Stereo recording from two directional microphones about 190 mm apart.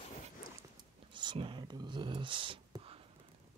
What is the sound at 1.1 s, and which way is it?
Speech, 25° right (ahead or behind).